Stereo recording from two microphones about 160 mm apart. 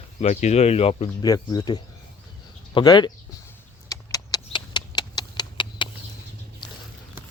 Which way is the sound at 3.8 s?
25° left (ahead or behind).